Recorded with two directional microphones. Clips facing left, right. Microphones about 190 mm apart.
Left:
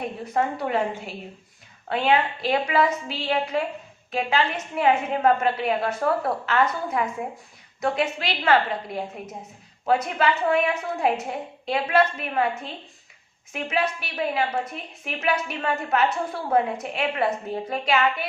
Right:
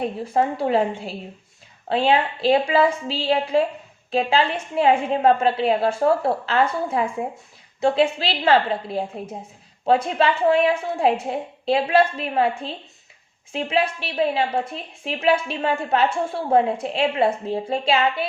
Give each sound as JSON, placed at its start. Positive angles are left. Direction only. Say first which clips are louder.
{"t": 0.0, "sound": "a woman's voice", "louder": "right 4 dB", "side_deg": -30}